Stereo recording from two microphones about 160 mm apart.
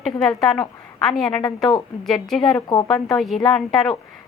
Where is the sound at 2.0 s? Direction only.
Centre (ahead or behind).